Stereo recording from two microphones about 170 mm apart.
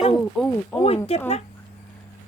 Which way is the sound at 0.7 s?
15° left (ahead or behind).